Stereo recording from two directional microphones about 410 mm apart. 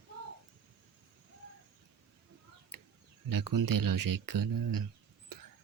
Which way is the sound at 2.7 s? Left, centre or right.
Right.